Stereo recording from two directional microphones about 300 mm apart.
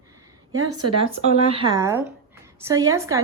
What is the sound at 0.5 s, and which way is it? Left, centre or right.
Speech, right.